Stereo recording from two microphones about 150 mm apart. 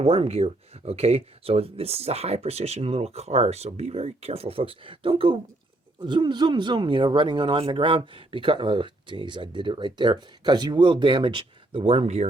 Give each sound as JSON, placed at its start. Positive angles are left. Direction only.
{"t": 0.0, "sound": "speech", "side_deg": -40}